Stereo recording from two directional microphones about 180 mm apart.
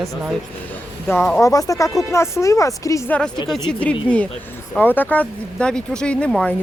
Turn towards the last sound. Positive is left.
turn(degrees=5)  # may be behind; listen again after turning